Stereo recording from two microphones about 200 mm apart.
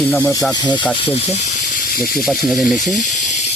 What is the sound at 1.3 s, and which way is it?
Speech, 45° left (ahead or behind).